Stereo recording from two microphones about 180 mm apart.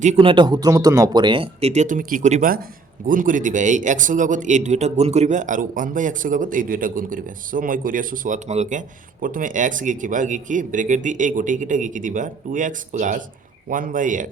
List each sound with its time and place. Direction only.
0.0 s speech: 35° right (ahead or behind)